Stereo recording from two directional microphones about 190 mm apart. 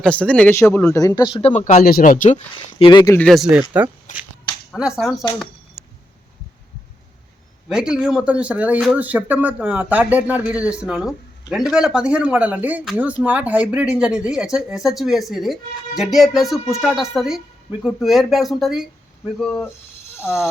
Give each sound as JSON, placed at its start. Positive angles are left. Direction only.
{"t": 0.0, "sound": "a man's voice", "side_deg": 5}
{"t": 1.0, "sound": "speech", "side_deg": 25}
{"t": 2.7, "sound": "speech", "side_deg": 25}
{"t": 3.2, "sound": "speech", "side_deg": 0}
{"t": 4.1, "sound": "speech", "side_deg": 40}
{"t": 4.7, "sound": "speech", "side_deg": 0}
{"t": 5.8, "sound": "a sound", "side_deg": 0}
{"t": 7.7, "sound": "speech", "side_deg": -5}